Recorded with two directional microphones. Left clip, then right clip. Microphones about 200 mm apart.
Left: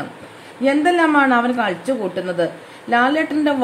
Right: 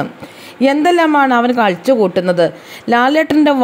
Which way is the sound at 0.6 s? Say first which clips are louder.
Right 4 dB; 40° right (ahead or behind).